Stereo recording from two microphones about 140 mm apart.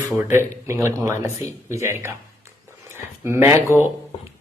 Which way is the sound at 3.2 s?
20° right (ahead or behind).